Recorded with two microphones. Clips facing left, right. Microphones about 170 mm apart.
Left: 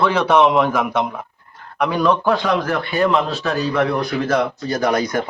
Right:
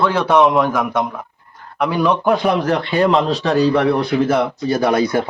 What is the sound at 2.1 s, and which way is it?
A man's voice, 20° right (ahead or behind).